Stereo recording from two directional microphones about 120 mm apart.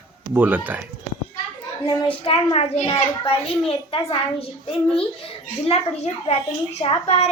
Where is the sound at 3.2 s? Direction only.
50° left (ahead or behind).